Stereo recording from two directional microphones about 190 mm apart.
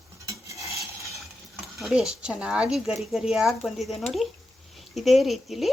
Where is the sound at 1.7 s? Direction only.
Centre (ahead or behind).